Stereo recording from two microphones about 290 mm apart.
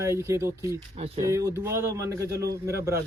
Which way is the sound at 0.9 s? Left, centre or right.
Right.